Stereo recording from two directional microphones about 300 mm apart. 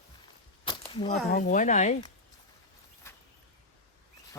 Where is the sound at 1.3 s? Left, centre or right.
Left.